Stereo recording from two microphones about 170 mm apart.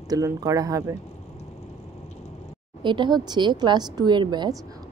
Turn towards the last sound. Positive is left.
turn(degrees=-25)  # may be behind; listen again after turning